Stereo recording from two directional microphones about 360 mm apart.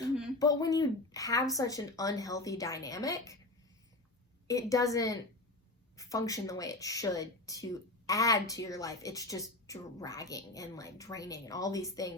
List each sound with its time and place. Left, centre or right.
0.3 s a woman's voice: centre
4.4 s a woman's voice: centre